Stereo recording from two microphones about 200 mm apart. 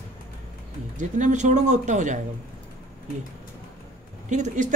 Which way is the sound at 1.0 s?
40° right (ahead or behind).